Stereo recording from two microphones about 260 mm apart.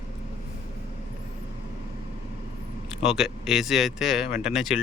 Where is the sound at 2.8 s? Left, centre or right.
Centre.